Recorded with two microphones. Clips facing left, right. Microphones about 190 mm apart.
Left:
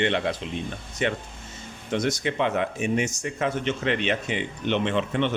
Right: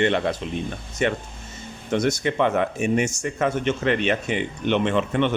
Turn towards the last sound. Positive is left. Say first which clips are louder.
# right 3 dB
turn(degrees=-50)  # may be behind; listen again after turning